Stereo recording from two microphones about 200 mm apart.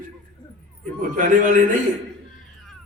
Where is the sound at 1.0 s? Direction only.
40° right (ahead or behind).